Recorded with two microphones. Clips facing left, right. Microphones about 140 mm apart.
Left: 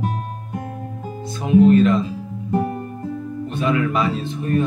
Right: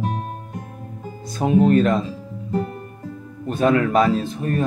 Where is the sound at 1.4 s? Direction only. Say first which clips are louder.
Left 3 dB; 40° right (ahead or behind).